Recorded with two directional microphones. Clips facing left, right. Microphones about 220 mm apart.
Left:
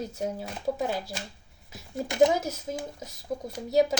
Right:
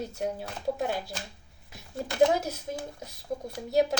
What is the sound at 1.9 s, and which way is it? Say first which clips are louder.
Speech: left 2 dB; 15° left (ahead or behind).